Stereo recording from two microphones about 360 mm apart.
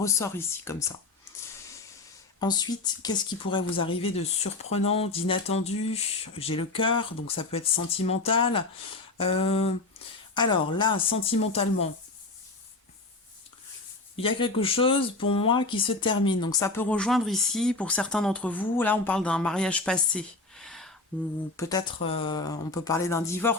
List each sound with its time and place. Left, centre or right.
0.0 s speech: centre
2.4 s speech: centre
14.2 s speech: centre